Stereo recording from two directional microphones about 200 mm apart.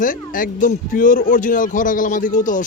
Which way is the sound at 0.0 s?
40° left (ahead or behind).